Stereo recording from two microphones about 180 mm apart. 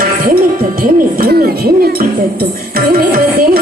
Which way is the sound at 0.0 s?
50° right (ahead or behind).